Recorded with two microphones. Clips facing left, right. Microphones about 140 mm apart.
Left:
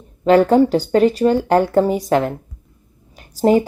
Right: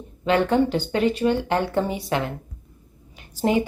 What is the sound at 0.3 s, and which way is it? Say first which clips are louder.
A woman's voice: left 8 dB; 40° left (ahead or behind).